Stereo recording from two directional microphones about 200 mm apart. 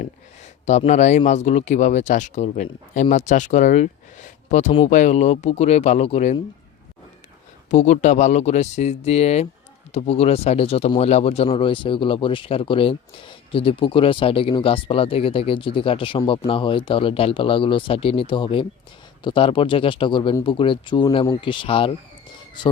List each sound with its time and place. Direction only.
0.6 s speech: 35° left (ahead or behind)
7.7 s speech: 35° left (ahead or behind)